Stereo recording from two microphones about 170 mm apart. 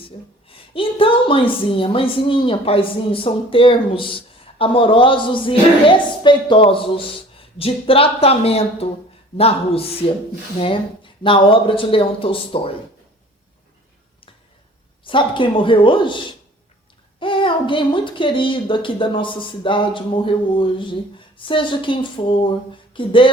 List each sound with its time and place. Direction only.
0.4 s a woman's voice: 30° left (ahead or behind)
15.0 s speech: 30° left (ahead or behind)